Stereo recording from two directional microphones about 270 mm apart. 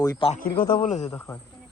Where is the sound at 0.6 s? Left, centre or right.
Left.